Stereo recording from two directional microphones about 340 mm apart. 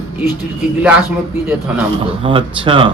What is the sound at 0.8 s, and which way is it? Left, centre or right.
Speech, centre.